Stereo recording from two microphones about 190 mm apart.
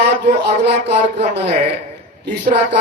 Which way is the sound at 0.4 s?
60° right (ahead or behind).